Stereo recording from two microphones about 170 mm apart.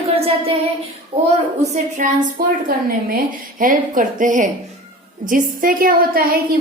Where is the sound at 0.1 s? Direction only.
35° right (ahead or behind).